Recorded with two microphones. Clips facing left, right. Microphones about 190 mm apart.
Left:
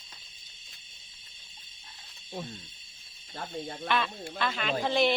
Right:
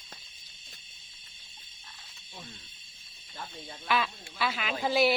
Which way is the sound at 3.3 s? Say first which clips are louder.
Left 7 dB; 55° left (ahead or behind).